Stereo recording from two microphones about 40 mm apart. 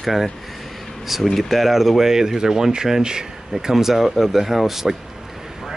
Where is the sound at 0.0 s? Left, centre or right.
Centre.